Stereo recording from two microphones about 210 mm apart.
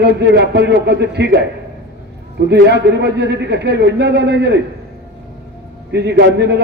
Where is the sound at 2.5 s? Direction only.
55° right (ahead or behind).